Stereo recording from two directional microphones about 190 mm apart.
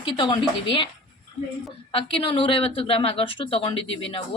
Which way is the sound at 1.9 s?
30° left (ahead or behind).